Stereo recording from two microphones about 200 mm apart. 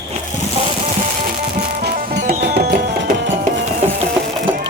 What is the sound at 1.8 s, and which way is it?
Music, 55° right (ahead or behind).